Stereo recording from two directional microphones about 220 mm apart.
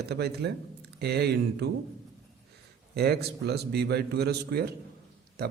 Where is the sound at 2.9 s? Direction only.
45° right (ahead or behind).